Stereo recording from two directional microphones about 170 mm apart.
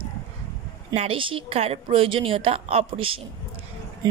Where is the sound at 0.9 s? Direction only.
30° right (ahead or behind).